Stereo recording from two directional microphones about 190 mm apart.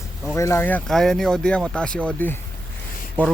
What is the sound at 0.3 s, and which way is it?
Speech, 15° left (ahead or behind).